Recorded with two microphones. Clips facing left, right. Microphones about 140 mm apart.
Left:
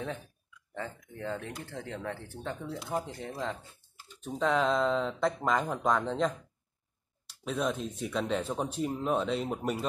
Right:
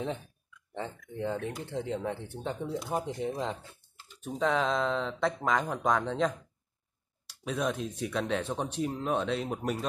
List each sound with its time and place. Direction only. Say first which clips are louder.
0.7 s speech: right 3 dB; 20° right (ahead or behind)
4.2 s speech: even; centre (ahead or behind)
7.4 s speech: even; centre (ahead or behind)